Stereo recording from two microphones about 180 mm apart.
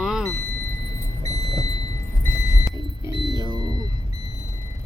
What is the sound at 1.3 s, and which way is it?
Vehicle, 20° left (ahead or behind).